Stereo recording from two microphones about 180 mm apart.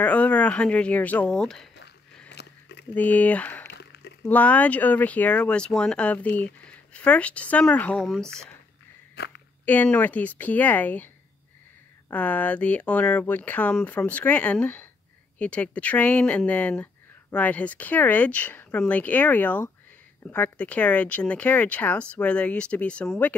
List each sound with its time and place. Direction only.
0.0 s speech: 5° left (ahead or behind)
2.4 s a sound: 70° left (ahead or behind)
2.9 s speech: 10° left (ahead or behind)
3.6 s a sound: 70° left (ahead or behind)
4.3 s speech: 10° left (ahead or behind)
9.2 s speech: 65° left (ahead or behind)
9.7 s speech: 10° left (ahead or behind)
12.1 s speech: 10° left (ahead or behind)